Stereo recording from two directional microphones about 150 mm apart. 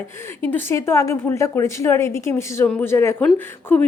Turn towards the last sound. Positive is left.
turn(degrees=10)  # may be behind; listen again after turning